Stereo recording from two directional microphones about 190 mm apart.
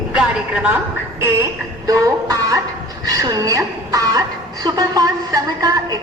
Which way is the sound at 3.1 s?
20° right (ahead or behind).